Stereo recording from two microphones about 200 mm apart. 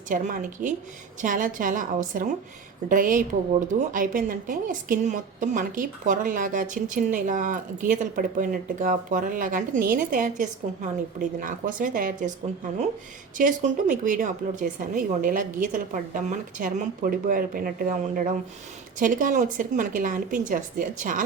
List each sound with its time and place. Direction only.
0.1 s a woman's voice: 40° right (ahead or behind)
13.3 s a woman's voice: 40° right (ahead or behind)